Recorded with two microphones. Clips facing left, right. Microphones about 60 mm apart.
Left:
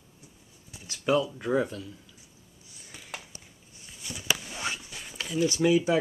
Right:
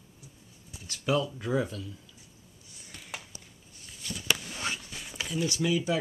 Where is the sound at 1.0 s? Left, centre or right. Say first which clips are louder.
Left 3 dB; centre.